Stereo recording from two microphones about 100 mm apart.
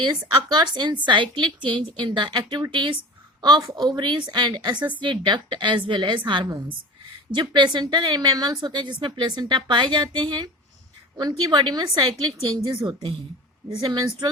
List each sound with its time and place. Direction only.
0.5 s a woman's voice: 45° right (ahead or behind)
3.6 s a woman's voice: 30° right (ahead or behind)
3.8 s a woman's voice: 50° right (ahead or behind)